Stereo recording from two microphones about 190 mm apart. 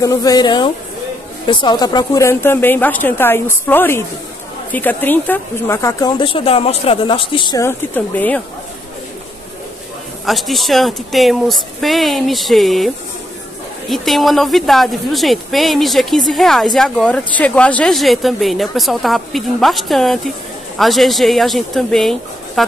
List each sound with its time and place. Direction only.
0.0 s a woman's voice: 20° left (ahead or behind)
10.2 s a woman's voice: centre (ahead or behind)